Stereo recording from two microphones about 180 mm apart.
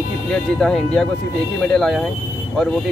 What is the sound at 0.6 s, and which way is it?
Speech, 5° left (ahead or behind).